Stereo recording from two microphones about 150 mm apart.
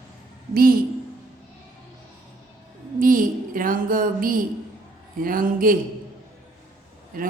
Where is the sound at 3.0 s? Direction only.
65° right (ahead or behind).